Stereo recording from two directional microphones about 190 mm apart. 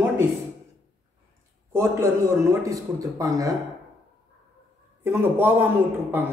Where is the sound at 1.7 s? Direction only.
15° right (ahead or behind).